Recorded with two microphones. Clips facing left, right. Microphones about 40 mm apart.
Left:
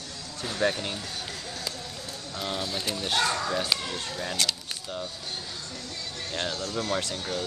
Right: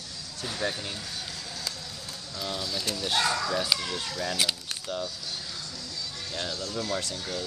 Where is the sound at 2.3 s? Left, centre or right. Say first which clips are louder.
Left 2 dB; left.